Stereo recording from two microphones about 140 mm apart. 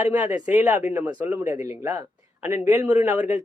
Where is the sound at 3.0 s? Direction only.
10° right (ahead or behind).